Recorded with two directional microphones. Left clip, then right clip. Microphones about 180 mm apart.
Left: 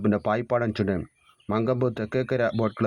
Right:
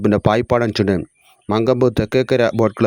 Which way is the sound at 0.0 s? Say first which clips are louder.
Right 9 dB; 30° right (ahead or behind).